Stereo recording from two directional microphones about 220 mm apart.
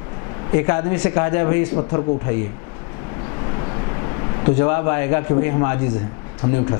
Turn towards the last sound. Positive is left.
turn(degrees=15)  # may be behind; listen again after turning